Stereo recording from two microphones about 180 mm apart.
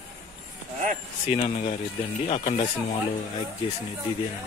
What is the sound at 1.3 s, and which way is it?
Speech, 35° left (ahead or behind).